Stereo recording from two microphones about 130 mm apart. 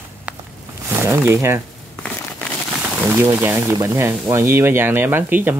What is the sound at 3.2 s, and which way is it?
Speech, 15° right (ahead or behind).